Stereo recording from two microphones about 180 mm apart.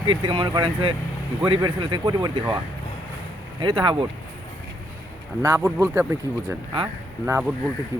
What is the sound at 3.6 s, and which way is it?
Speech, 25° right (ahead or behind).